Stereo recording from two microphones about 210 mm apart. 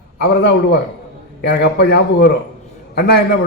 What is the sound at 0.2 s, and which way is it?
A man's voice, 50° left (ahead or behind).